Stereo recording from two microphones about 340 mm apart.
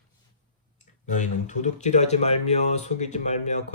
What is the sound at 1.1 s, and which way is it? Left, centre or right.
Speech, left.